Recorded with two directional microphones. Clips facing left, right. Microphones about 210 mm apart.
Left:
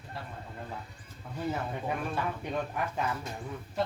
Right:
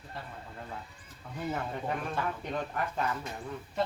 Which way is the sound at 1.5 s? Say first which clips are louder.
Even; 5° left (ahead or behind).